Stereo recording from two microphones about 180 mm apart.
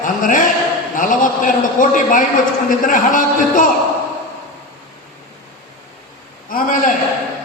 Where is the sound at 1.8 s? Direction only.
45° left (ahead or behind).